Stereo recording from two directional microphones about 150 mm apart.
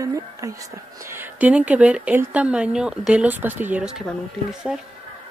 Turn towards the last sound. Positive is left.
turn(degrees=-5)  # may be behind; listen again after turning